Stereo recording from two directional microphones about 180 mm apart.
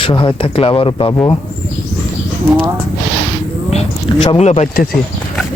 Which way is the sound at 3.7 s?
30° left (ahead or behind).